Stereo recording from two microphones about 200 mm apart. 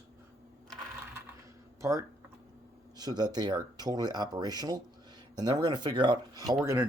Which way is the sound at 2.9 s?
20° right (ahead or behind).